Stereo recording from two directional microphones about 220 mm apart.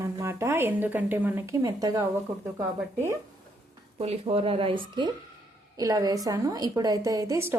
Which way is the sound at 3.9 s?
25° right (ahead or behind).